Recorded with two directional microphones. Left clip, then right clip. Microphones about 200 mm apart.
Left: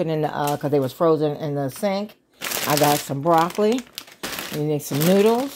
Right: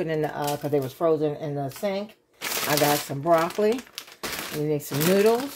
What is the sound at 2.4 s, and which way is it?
Speech, 30° left (ahead or behind).